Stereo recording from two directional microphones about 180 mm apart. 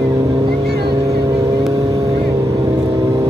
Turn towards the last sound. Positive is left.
turn(degrees=-20)  # may be behind; listen again after turning